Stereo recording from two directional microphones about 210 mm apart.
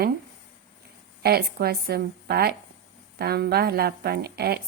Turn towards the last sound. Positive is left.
turn(degrees=-50)  # may be behind; listen again after turning